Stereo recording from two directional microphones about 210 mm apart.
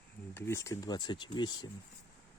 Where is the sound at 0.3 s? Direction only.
15° left (ahead or behind).